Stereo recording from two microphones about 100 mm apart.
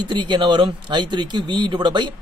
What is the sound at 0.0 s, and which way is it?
Speech, 50° right (ahead or behind).